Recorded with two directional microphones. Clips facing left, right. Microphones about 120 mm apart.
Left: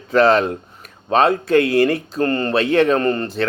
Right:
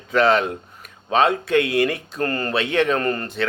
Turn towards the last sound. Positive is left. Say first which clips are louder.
# left 4 dB
turn(degrees=30)  # may be behind; listen again after turning